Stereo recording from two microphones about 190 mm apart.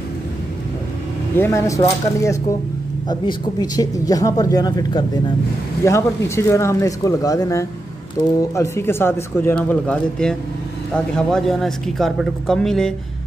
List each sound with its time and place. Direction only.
1.3 s speech: 15° left (ahead or behind)